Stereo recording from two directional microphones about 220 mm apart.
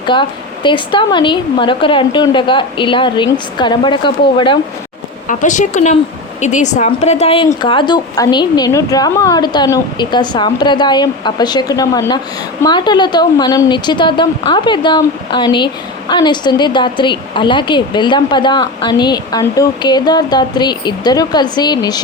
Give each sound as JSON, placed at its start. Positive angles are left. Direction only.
{"t": 0.0, "sound": "speech", "side_deg": 20}
{"t": 5.3, "sound": "a woman's voice", "side_deg": 35}